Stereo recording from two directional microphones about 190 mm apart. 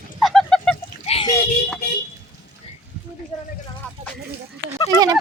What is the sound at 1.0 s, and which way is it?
Splash, 30° left (ahead or behind).